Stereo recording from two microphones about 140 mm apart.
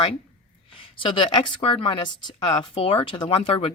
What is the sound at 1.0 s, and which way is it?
A woman's voice, 35° left (ahead or behind).